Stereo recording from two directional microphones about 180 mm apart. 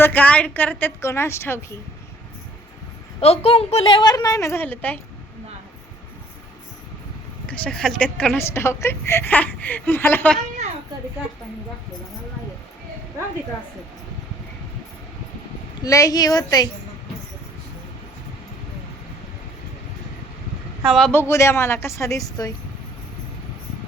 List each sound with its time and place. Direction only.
0.0 s a woman's voice: 10° left (ahead or behind)
3.2 s a woman's voice: 35° left (ahead or behind); by 4.9 s 10° left (ahead or behind)
7.6 s a woman's voice: 5° left (ahead or behind)
15.8 s a woman's voice: 20° left (ahead or behind)
20.9 s a woman's voice: 5° left (ahead or behind)